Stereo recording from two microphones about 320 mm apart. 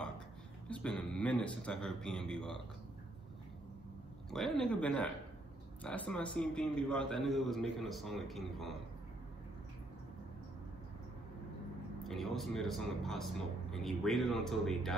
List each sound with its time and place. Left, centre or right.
0.7 s a man's voice: centre
4.3 s a man's voice: centre
12.0 s a man's voice: centre